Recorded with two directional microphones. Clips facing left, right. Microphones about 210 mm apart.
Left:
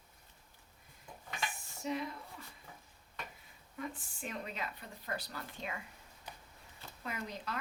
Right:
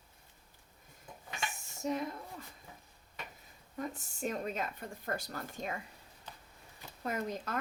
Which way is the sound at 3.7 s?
45° right (ahead or behind).